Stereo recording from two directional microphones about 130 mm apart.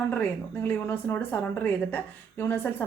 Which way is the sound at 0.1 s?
15° left (ahead or behind).